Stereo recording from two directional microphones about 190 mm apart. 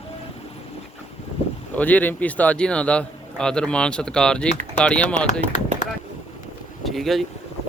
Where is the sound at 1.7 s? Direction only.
10° left (ahead or behind).